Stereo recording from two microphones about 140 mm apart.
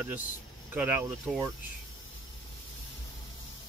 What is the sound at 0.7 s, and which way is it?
Speech, 15° right (ahead or behind).